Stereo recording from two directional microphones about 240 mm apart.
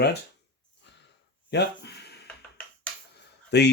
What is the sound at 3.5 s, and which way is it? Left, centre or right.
Speech, left.